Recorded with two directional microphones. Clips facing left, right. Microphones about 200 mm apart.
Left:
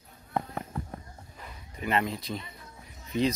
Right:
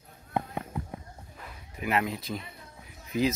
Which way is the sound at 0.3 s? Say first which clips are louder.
Right 1 dB; 10° right (ahead or behind).